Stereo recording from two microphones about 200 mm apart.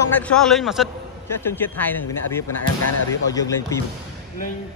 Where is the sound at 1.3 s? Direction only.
10° left (ahead or behind).